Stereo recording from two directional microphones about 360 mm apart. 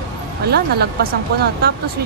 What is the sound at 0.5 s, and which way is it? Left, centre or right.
Speech, right.